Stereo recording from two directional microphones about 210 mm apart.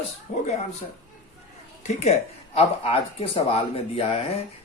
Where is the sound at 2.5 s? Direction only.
25° left (ahead or behind).